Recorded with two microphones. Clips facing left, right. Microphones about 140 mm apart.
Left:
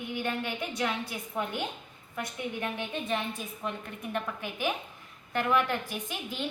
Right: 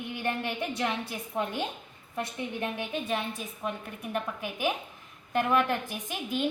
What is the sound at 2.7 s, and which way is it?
A woman's voice, 5° right (ahead or behind).